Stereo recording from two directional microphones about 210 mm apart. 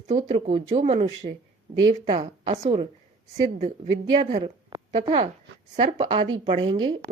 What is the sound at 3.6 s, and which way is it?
Speech, 30° right (ahead or behind).